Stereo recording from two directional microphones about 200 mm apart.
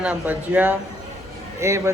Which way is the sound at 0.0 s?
5° right (ahead or behind).